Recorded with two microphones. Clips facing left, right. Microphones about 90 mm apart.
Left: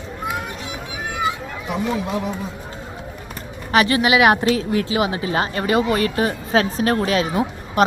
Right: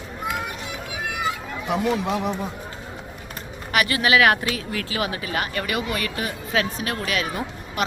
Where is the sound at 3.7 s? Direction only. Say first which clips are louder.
Left 4 dB; 30° left (ahead or behind).